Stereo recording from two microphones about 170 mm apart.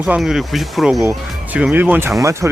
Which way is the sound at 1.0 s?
15° right (ahead or behind).